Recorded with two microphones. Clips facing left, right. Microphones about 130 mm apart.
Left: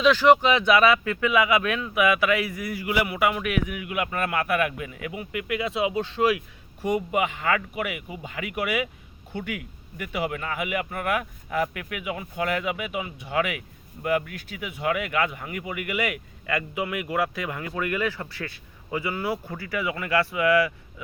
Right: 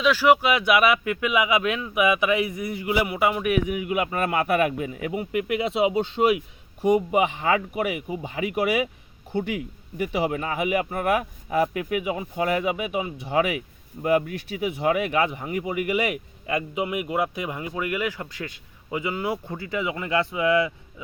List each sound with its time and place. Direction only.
0.0 s speech: 5° right (ahead or behind); by 20.7 s 25° right (ahead or behind)